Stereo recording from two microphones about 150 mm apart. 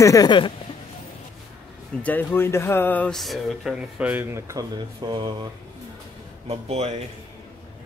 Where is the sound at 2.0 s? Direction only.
15° left (ahead or behind); by 4.6 s 20° right (ahead or behind).